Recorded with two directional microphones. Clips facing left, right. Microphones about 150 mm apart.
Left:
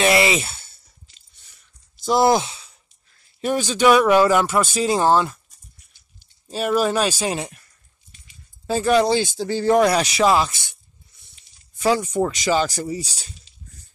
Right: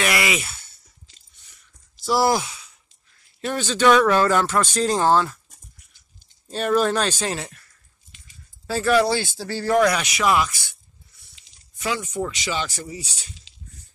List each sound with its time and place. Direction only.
0.0 s speech: 30° left (ahead or behind)
2.0 s speech: 20° left (ahead or behind)
3.3 s speech: 15° left (ahead or behind)
6.5 s speech: 5° left (ahead or behind)
8.1 s a sound: 90° right
8.6 s speech: 20° left (ahead or behind)
11.8 s speech: 35° left (ahead or behind)